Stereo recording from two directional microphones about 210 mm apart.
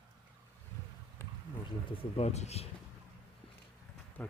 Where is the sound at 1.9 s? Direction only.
25° left (ahead or behind).